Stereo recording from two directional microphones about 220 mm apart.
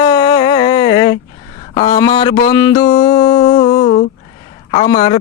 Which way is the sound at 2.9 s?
25° left (ahead or behind).